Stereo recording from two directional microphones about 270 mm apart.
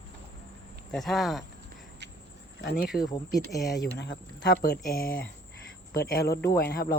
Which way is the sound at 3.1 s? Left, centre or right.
Centre.